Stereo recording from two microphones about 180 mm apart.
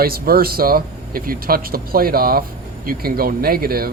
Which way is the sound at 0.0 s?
55° right (ahead or behind).